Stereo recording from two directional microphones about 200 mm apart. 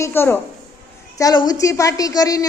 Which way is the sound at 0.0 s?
10° left (ahead or behind).